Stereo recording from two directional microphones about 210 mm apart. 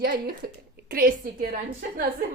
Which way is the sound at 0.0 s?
45° right (ahead or behind).